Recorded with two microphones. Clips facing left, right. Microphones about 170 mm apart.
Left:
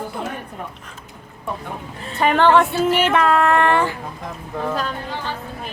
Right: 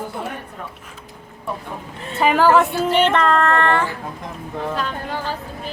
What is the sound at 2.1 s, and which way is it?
Speech, 5° right (ahead or behind).